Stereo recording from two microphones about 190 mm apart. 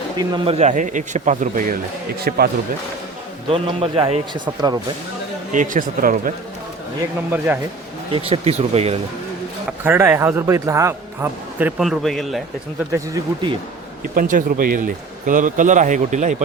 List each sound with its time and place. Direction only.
0.2 s a man's voice: 25° right (ahead or behind)
0.6 s speech: 40° right (ahead or behind)
3.5 s a man's voice: 30° right (ahead or behind)
5.5 s speech: 45° right (ahead or behind)
7.3 s a man's voice: 10° right (ahead or behind)
8.1 s speech: 30° right (ahead or behind)
9.8 s a man's voice: 10° right (ahead or behind)
11.8 s speech: centre (ahead or behind)
14.2 s speech: 45° right (ahead or behind)